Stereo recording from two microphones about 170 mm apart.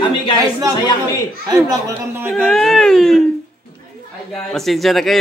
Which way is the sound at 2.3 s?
5° left (ahead or behind).